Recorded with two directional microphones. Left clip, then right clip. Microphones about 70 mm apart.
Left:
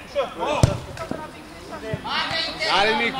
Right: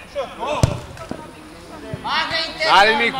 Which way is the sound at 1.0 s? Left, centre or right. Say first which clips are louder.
Left 1 dB; centre.